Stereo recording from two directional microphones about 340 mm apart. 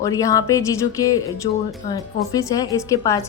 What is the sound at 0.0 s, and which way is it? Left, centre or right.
Speech, centre.